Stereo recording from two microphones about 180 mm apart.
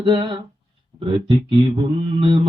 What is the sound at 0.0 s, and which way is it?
Mantra, 25° right (ahead or behind).